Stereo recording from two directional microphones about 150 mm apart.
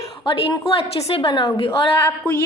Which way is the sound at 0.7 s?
35° left (ahead or behind).